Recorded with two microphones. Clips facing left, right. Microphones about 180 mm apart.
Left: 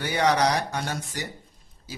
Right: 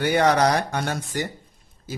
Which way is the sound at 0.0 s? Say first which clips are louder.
Right 4 dB; 55° right (ahead or behind).